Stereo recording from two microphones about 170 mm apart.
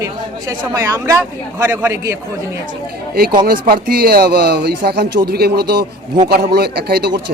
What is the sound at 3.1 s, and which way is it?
Speech, 65° right (ahead or behind).